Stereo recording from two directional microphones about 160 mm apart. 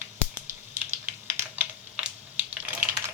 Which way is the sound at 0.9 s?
15° right (ahead or behind).